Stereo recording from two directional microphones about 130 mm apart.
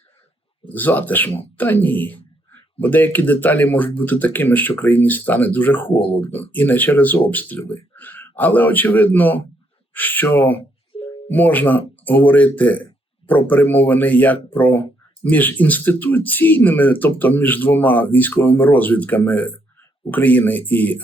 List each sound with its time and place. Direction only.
0.7 s speech: 15° left (ahead or behind)
10.9 s music: 45° left (ahead or behind)
11.3 s speech: 15° left (ahead or behind)